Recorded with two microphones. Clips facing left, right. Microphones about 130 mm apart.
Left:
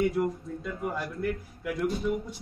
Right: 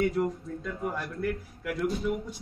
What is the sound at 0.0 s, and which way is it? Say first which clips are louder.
Speech: even; 10° left (ahead or behind).